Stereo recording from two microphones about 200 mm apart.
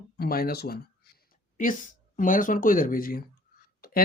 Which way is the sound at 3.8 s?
50° left (ahead or behind).